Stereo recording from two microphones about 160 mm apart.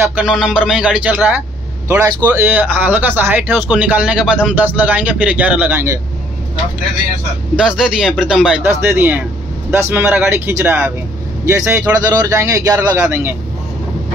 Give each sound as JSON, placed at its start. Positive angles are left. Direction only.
{"t": 0.2, "sound": "a man's voice", "side_deg": -5}
{"t": 7.5, "sound": "a man's voice", "side_deg": -5}